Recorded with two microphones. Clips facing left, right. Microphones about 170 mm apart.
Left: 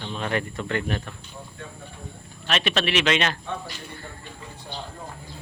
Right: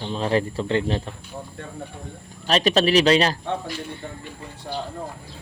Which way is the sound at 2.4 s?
35° right (ahead or behind).